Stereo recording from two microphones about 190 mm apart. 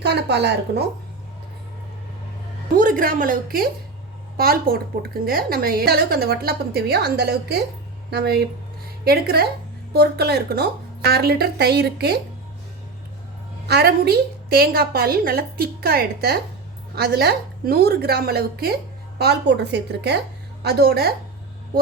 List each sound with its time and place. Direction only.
0.0 s a woman's voice: 65° right (ahead or behind)
2.7 s a woman's voice: 45° right (ahead or behind)
13.7 s a woman's voice: 55° right (ahead or behind)